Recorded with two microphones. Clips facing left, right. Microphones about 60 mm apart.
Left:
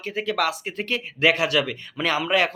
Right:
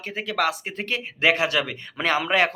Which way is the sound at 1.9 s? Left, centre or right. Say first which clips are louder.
Right 1 dB; right.